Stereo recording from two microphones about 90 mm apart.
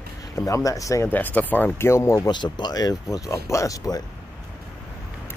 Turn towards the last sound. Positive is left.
turn(degrees=40)  # may be behind; listen again after turning